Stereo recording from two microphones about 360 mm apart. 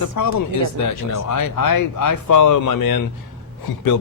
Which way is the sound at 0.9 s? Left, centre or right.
Left.